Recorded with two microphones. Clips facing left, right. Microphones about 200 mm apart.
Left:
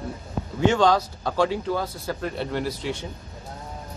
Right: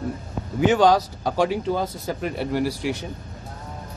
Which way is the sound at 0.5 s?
10° right (ahead or behind).